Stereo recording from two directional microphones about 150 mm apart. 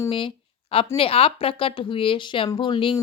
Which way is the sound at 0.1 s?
35° left (ahead or behind).